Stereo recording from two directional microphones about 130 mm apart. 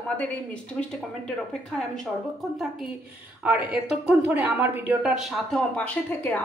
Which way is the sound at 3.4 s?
10° right (ahead or behind).